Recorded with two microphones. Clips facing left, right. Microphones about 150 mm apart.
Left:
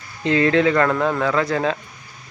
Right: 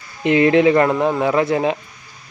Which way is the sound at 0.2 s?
20° right (ahead or behind).